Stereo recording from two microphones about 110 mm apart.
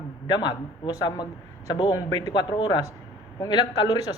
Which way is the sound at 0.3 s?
40° left (ahead or behind).